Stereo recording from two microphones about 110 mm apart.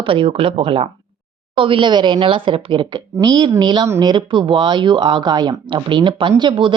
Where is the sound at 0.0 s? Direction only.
55° right (ahead or behind).